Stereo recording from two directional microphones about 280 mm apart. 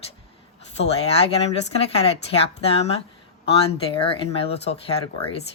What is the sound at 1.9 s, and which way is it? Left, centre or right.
Speech, left.